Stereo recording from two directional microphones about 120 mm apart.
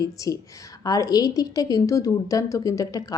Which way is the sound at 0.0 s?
30° left (ahead or behind).